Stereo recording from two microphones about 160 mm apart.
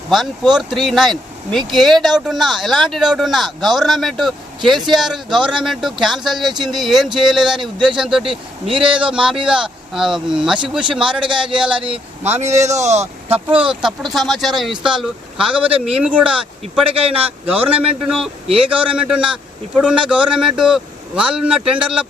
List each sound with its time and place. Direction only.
0.1 s speech: centre (ahead or behind)
11.3 s a man's voice: 30° right (ahead or behind)
11.5 s speech: 5° right (ahead or behind)
11.8 s speech: 40° right (ahead or behind)
13.5 s speech: 5° right (ahead or behind)
16.8 s a man's voice: 35° right (ahead or behind)
18.7 s speech: 10° right (ahead or behind)